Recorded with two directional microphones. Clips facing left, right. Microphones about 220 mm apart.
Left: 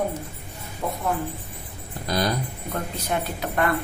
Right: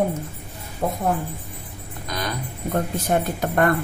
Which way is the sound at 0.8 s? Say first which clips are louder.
Right 4 dB; 45° right (ahead or behind).